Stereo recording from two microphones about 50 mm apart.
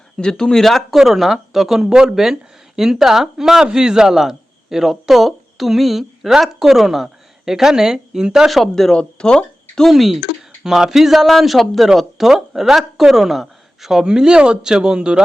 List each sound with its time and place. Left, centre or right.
0.2 s speech: centre
1.9 s speech: centre
8.6 s speech: centre
9.9 s speech: centre
14.0 s speech: centre